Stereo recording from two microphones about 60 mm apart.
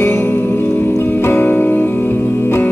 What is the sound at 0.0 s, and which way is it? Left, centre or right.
Music, left.